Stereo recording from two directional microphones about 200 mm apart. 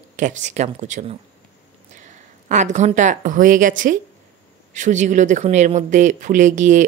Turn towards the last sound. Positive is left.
turn(degrees=-40)  # may be behind; listen again after turning